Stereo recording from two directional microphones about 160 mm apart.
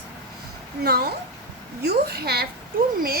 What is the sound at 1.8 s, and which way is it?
Speech, 90° right.